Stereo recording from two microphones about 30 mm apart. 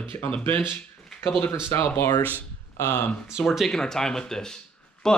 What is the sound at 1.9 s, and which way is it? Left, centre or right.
Speech, left.